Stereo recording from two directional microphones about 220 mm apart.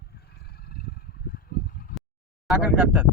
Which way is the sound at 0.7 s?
45° left (ahead or behind).